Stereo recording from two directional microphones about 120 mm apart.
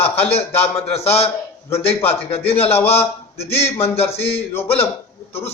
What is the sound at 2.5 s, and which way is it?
Speech, 55° left (ahead or behind).